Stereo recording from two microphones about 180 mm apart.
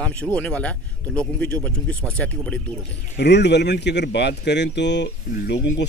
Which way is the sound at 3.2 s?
70° left (ahead or behind).